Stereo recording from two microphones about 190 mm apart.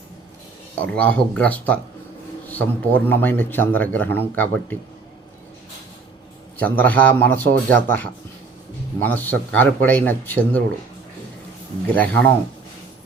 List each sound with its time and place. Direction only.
0.8 s a man's voice: 5° left (ahead or behind)
6.6 s a man's voice: 10° left (ahead or behind)
11.9 s a man's voice: 10° left (ahead or behind)